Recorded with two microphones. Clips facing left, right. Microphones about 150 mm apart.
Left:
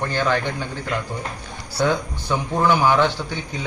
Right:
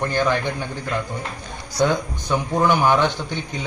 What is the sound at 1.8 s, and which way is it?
Speech, 15° right (ahead or behind).